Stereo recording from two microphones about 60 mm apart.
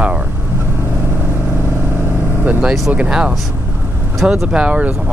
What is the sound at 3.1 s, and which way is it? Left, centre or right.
Speech, centre.